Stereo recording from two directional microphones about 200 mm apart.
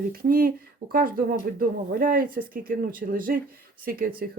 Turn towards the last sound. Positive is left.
turn(degrees=-45)  # may be behind; listen again after turning